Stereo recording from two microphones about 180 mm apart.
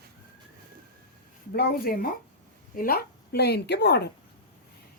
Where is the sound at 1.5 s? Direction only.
55° left (ahead or behind).